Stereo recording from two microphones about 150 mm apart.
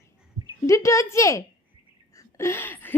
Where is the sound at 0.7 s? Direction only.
20° left (ahead or behind).